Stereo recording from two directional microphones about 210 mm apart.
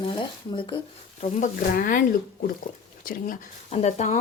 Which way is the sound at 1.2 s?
40° left (ahead or behind).